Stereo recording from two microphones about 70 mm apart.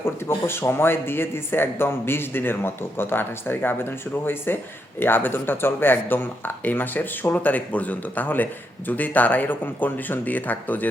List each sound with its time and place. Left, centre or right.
0.0 s a man's voice: left